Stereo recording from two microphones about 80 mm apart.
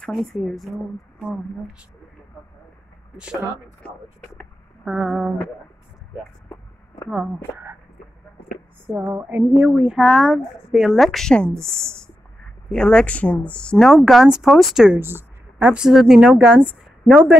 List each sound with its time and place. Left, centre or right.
0.1 s a woman's voice: centre
4.8 s speech: centre
7.5 s speech: right
8.8 s a sound: right
9.8 s a woman's voice: centre
15.0 s a sound: right
15.6 s speech: centre
15.9 s speech: centre